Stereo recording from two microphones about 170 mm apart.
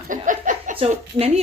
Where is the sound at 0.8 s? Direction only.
35° right (ahead or behind).